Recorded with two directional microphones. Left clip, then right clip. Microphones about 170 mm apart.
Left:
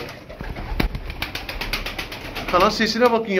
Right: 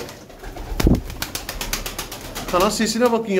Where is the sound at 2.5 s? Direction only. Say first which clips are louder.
Left 1 dB; 30° right (ahead or behind).